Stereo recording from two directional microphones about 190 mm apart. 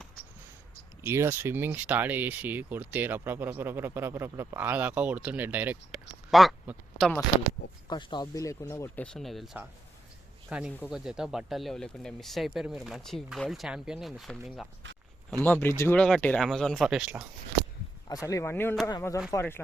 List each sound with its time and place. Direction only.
1.0 s speech: 15° right (ahead or behind)
7.9 s speech: 25° left (ahead or behind)
9.1 s speech: centre (ahead or behind)
15.4 s speech: 10° left (ahead or behind); by 17.2 s 5° right (ahead or behind)
18.1 s speech: 15° left (ahead or behind)